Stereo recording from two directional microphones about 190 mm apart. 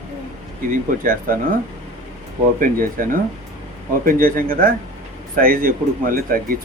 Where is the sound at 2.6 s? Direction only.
45° right (ahead or behind).